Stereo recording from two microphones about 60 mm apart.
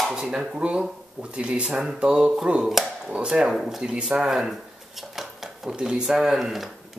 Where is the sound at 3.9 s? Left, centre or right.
Centre.